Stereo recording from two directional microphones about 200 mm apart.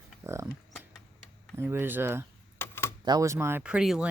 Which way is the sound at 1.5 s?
10° right (ahead or behind).